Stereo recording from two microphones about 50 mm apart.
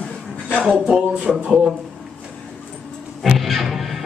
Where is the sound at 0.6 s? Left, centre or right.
Centre.